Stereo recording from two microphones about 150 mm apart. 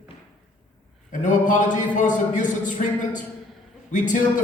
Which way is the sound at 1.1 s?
60° left (ahead or behind).